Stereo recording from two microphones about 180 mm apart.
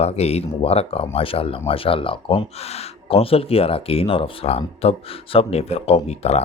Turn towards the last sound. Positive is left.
turn(degrees=35)  # may be behind; listen again after turning